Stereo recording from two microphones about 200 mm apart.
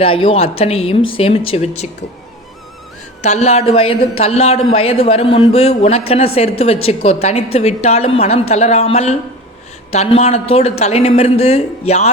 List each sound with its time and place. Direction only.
0.0 s a man's voice: 25° left (ahead or behind)
3.2 s a man's voice: 35° left (ahead or behind)